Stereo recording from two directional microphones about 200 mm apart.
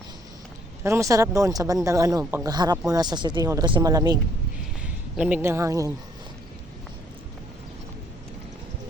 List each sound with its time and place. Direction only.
0.8 s speech: 15° right (ahead or behind)
4.8 s speech: 5° right (ahead or behind)